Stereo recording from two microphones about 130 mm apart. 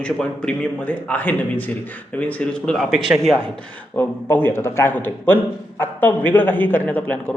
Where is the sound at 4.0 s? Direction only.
15° left (ahead or behind).